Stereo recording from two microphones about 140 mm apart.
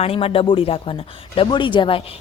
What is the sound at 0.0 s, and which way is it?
A woman's voice, 45° left (ahead or behind).